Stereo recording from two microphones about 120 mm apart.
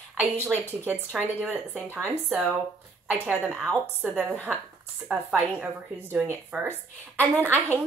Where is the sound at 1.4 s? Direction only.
15° right (ahead or behind).